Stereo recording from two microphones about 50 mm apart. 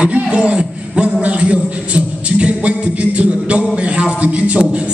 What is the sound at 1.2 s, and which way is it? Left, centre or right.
A man's voice, right.